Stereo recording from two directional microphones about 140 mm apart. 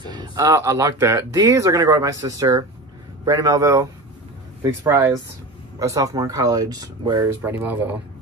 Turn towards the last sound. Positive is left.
turn(degrees=-15)  # may be behind; listen again after turning